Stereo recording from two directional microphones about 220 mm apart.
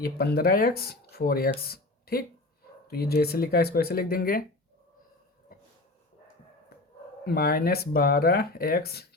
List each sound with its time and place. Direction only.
0.0 s speech: 45° left (ahead or behind)
7.3 s speech: 45° left (ahead or behind)